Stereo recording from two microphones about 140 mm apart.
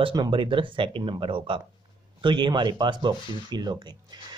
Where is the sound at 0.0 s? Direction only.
35° right (ahead or behind).